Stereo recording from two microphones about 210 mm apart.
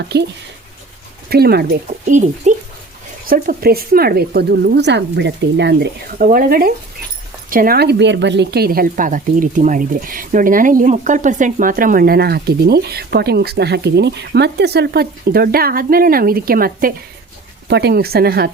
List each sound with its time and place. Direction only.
0.0 s a woman's voice: 55° right (ahead or behind)
1.3 s a woman's voice: 50° right (ahead or behind)
2.0 s a woman's voice: 35° right (ahead or behind)